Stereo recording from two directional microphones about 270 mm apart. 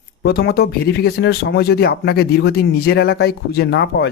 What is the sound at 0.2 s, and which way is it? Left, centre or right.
Speech, left.